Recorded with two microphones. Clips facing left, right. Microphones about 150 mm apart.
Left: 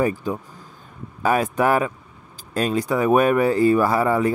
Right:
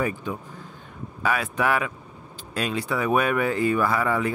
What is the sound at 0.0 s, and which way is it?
Speech, 40° left (ahead or behind).